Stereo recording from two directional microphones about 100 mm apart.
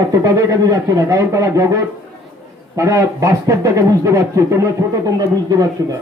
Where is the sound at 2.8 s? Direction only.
30° right (ahead or behind).